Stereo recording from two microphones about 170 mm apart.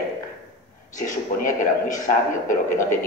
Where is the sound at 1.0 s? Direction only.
50° left (ahead or behind).